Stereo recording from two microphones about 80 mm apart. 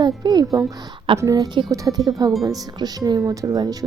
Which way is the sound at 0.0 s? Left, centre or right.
Right.